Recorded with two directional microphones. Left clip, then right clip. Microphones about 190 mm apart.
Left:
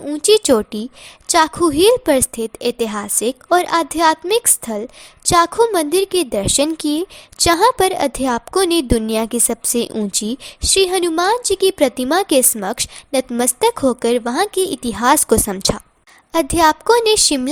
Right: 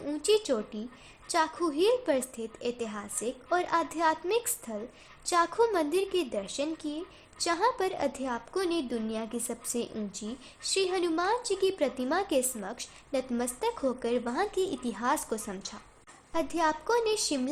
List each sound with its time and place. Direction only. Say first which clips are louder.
0.0 s a woman's voice: left 13 dB; 35° left (ahead or behind)